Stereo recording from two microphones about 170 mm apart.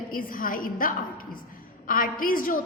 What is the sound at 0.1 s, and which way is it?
A woman's voice, 55° left (ahead or behind).